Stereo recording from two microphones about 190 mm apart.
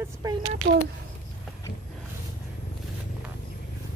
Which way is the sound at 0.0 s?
20° right (ahead or behind).